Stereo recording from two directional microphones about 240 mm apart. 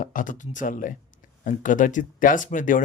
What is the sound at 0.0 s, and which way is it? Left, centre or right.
A man's voice, left.